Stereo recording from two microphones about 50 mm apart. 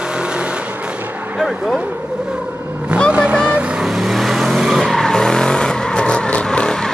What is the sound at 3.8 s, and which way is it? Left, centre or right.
Vehicle, centre.